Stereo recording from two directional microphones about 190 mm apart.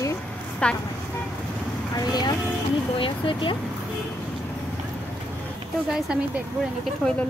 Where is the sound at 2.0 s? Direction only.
20° left (ahead or behind).